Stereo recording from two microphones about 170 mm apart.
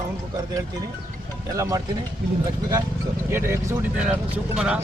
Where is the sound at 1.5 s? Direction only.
20° right (ahead or behind).